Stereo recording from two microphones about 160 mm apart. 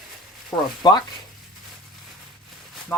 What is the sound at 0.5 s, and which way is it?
Speech, 25° left (ahead or behind).